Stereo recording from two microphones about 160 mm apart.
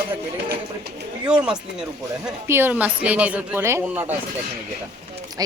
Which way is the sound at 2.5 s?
15° right (ahead or behind).